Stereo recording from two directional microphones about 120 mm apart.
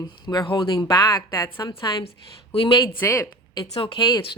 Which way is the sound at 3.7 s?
50° left (ahead or behind).